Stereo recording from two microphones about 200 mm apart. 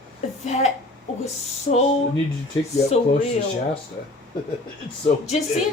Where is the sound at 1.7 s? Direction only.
50° left (ahead or behind).